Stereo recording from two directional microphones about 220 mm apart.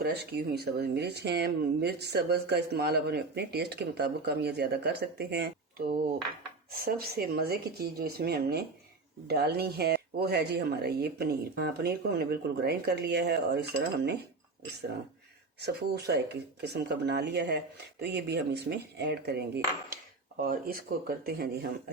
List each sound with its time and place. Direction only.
0.0 s speech: 45° right (ahead or behind)
15.6 s speech: 50° right (ahead or behind)